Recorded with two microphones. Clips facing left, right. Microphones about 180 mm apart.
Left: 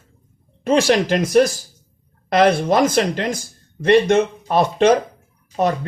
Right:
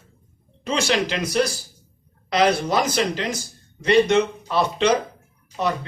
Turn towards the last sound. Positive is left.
turn(degrees=45)  # may be behind; listen again after turning